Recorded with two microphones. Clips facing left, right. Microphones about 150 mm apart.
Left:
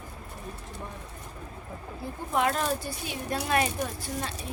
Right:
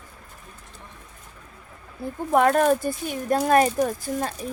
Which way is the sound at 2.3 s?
50° right (ahead or behind).